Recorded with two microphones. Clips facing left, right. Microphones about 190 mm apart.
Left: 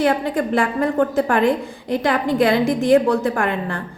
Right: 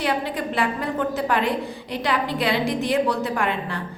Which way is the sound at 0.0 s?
45° left (ahead or behind).